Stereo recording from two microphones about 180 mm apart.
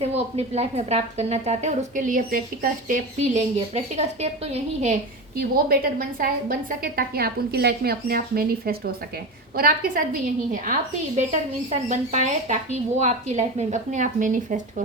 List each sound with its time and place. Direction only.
0.0 s a woman's voice: 35° right (ahead or behind)
5.4 s a woman's voice: 55° right (ahead or behind)